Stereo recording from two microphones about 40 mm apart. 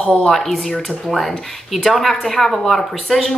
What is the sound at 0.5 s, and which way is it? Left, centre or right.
Speech, centre.